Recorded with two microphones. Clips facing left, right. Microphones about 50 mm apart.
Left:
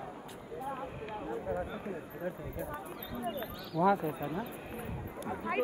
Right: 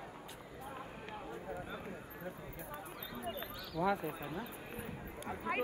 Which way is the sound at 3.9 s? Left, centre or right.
Left.